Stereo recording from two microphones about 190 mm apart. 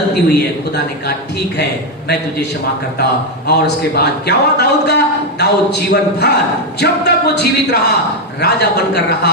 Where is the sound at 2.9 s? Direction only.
55° left (ahead or behind).